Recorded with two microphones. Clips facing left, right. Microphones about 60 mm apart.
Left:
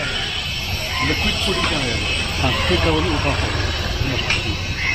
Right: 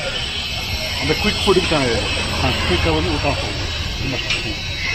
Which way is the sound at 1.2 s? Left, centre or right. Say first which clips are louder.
Right 6 dB; right.